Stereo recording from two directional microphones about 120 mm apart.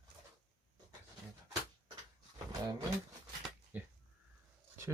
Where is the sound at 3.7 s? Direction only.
15° right (ahead or behind).